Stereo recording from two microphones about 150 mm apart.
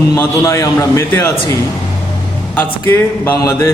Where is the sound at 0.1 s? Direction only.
20° left (ahead or behind).